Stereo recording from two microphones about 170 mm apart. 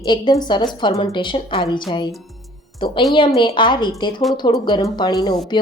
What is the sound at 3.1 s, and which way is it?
Speech, 30° left (ahead or behind).